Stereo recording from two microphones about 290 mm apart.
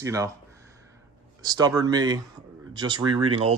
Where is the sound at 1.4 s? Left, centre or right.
Centre.